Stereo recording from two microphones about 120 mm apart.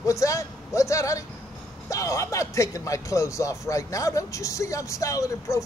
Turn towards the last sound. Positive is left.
turn(degrees=25)  # may be behind; listen again after turning